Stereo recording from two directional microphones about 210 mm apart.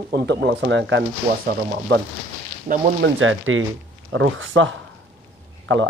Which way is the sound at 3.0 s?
70° right (ahead or behind).